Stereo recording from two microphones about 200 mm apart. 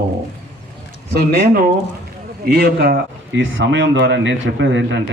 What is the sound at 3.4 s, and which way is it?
A man's voice, 70° right (ahead or behind).